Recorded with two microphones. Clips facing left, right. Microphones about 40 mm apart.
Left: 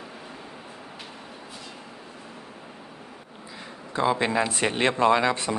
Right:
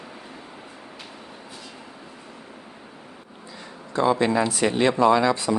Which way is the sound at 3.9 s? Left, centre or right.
Centre.